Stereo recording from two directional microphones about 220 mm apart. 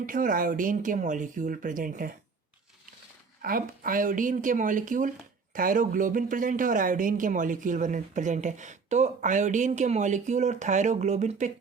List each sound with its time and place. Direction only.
0.0 s speech: 35° right (ahead or behind)
3.4 s speech: 40° right (ahead or behind)